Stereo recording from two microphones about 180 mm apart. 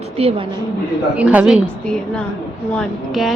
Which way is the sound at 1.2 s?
5° right (ahead or behind).